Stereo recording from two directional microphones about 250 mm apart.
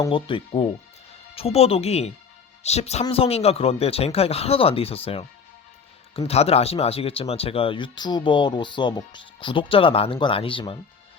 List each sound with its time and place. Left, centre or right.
0.0 s speech: centre